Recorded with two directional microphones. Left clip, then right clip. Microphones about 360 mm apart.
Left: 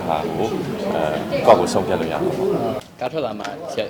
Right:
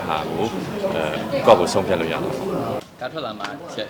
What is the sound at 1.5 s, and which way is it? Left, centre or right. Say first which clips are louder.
Speech: left 1 dB; centre.